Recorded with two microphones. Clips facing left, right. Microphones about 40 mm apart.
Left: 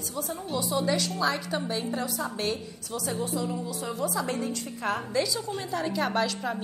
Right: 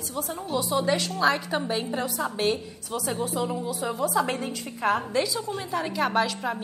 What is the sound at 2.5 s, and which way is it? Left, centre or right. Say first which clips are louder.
Speech: right 3 dB; centre.